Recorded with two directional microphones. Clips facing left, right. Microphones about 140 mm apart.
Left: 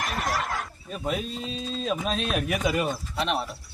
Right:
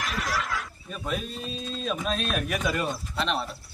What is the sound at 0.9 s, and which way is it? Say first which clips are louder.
Speech: left 3 dB; 20° left (ahead or behind).